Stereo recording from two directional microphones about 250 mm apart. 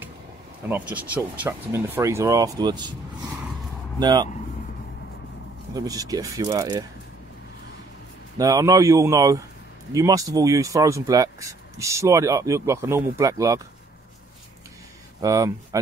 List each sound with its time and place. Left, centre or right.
0.7 s speech: centre
4.0 s speech: centre
5.7 s speech: centre
8.4 s speech: centre
15.2 s speech: centre